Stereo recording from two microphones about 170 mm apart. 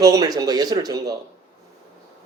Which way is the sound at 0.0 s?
20° right (ahead or behind).